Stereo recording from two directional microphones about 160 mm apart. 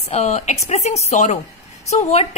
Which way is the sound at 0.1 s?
40° left (ahead or behind).